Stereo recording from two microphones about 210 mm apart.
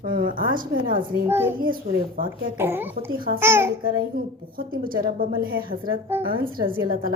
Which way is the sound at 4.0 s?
45° right (ahead or behind).